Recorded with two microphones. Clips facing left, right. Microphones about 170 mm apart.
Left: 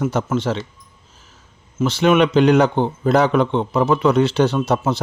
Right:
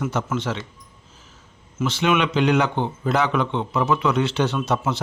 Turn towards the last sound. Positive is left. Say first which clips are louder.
# left 5 dB
turn(degrees=35)  # may be behind; listen again after turning